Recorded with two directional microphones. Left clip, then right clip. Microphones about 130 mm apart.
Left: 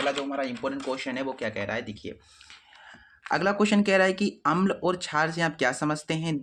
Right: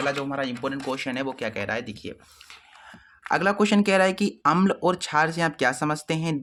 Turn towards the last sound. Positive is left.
turn(degrees=-35)  # may be behind; listen again after turning